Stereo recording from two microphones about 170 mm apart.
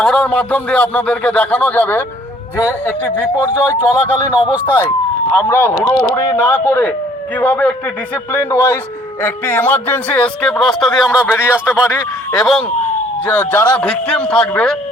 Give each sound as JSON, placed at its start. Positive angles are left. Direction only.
{"t": 0.0, "sound": "speech", "side_deg": 5}
{"t": 3.8, "sound": "speech", "side_deg": -10}
{"t": 4.6, "sound": "speech", "side_deg": 10}
{"t": 11.9, "sound": "speech", "side_deg": 15}
{"t": 12.4, "sound": "speech", "side_deg": 0}